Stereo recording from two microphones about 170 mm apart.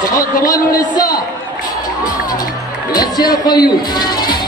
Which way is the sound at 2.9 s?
25° left (ahead or behind).